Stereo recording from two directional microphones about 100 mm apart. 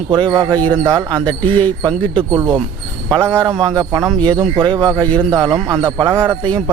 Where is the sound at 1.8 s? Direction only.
55° right (ahead or behind).